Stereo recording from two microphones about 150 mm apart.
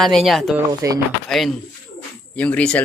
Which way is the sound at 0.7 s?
25° right (ahead or behind).